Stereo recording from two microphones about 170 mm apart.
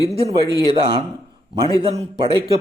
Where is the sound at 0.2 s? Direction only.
35° right (ahead or behind).